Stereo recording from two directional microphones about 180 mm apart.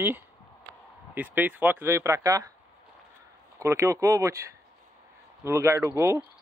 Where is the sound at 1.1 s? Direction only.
10° right (ahead or behind).